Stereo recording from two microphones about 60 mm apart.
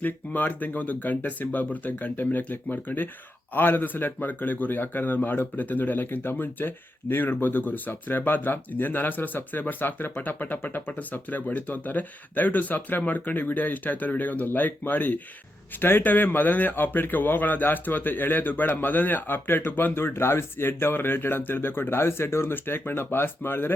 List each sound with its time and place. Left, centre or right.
0.0 s a man's voice: left